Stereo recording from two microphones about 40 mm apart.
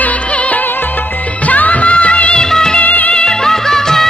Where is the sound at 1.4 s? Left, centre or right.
Left.